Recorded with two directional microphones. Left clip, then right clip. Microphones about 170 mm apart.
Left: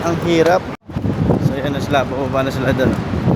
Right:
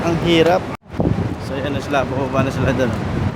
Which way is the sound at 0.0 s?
5° right (ahead or behind).